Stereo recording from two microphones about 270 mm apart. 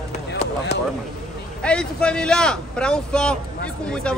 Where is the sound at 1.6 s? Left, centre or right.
Centre.